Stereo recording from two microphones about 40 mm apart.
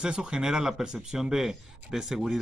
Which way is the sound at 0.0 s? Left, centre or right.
Right.